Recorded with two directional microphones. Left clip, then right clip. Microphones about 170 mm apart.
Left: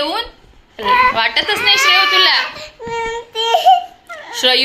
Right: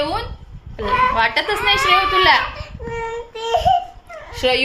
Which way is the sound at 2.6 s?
40° left (ahead or behind).